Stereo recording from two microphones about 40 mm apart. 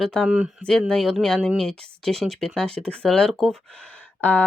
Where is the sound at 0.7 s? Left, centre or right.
Centre.